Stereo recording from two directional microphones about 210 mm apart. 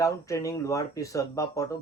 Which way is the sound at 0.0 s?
15° left (ahead or behind).